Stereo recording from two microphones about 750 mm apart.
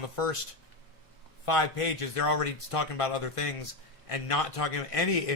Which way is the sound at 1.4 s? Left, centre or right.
Left.